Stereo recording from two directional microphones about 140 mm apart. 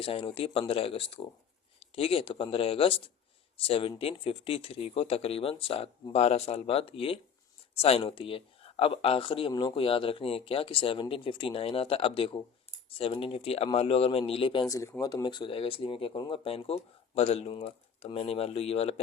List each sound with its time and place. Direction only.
0.0 s speech: 40° left (ahead or behind)
14.7 s speech: 20° left (ahead or behind); by 18.9 s 45° left (ahead or behind)